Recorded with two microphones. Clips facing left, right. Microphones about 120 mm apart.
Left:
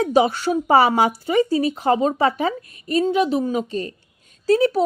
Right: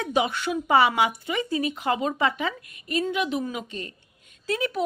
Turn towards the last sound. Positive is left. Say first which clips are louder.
# left 10 dB
turn(degrees=35)  # may be behind; listen again after turning